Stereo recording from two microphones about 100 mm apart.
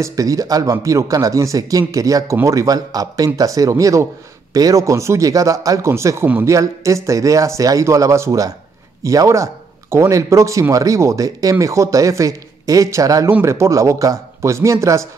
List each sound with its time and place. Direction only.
0.0 s speech: 35° right (ahead or behind)